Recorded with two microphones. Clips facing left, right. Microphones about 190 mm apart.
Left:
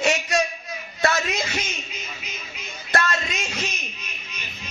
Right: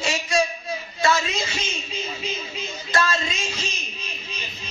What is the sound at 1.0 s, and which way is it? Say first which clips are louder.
Speech: right 1 dB; 60° left (ahead or behind).